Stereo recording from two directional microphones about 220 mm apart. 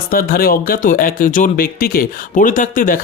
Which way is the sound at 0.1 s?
40° left (ahead or behind).